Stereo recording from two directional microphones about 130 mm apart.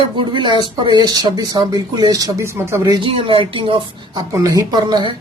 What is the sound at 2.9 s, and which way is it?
Speech, 40° right (ahead or behind).